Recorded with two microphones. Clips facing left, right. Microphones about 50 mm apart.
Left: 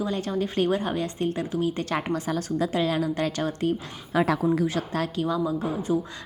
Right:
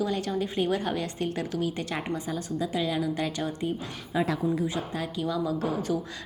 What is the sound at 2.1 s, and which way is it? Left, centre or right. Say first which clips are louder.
Speech: left 4 dB; left.